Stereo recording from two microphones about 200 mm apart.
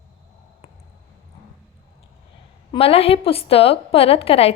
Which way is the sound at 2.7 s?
30° left (ahead or behind).